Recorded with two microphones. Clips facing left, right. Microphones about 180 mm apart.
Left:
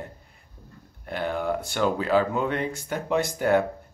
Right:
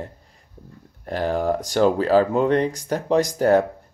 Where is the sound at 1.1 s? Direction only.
35° right (ahead or behind).